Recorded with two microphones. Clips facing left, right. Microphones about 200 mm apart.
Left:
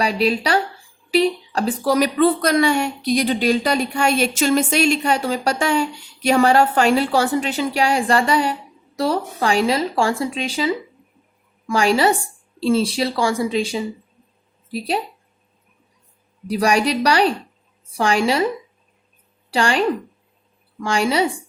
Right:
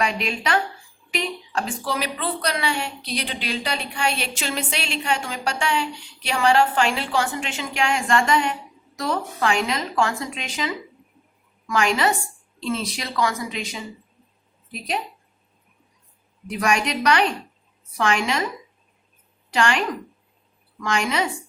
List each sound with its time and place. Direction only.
0.0 s a woman's voice: 35° left (ahead or behind)
16.5 s a woman's voice: 35° left (ahead or behind)
19.5 s a woman's voice: 30° left (ahead or behind)